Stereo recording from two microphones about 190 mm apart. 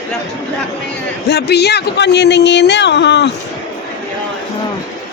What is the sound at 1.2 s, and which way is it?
Speech, 60° left (ahead or behind).